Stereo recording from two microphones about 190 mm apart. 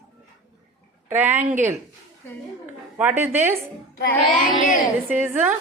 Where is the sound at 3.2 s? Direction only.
10° right (ahead or behind).